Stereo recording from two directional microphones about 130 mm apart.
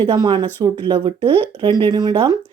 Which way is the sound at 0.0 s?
35° right (ahead or behind).